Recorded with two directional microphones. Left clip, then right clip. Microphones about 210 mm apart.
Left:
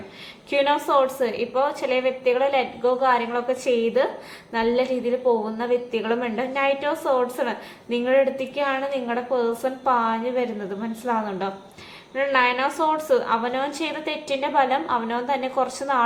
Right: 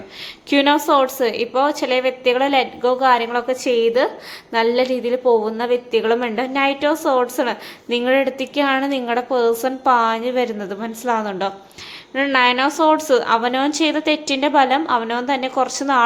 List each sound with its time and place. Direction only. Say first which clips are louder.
0.5 s a woman's voice: right 5 dB; 45° right (ahead or behind)